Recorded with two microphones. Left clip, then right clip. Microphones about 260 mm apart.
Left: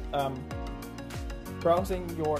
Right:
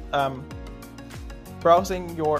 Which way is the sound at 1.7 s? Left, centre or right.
Centre.